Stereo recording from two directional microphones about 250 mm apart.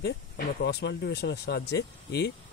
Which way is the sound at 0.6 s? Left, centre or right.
Left.